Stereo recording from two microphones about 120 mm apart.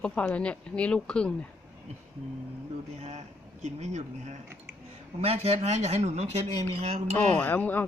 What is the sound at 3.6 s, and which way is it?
Speech, 70° right (ahead or behind).